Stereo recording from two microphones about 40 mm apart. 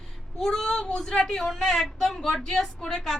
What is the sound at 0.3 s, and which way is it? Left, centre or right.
A woman's voice, centre.